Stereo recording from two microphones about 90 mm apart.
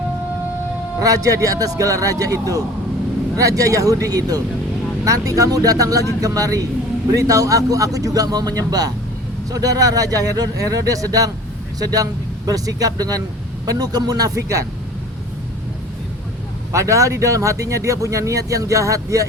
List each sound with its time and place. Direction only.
1.0 s speech: 40° right (ahead or behind)
16.7 s speech: 35° right (ahead or behind)